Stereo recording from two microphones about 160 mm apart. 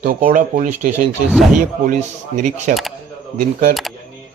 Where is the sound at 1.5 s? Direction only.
55° right (ahead or behind).